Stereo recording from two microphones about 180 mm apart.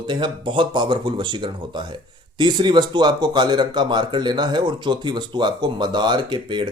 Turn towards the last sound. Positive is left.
turn(degrees=-25)  # may be behind; listen again after turning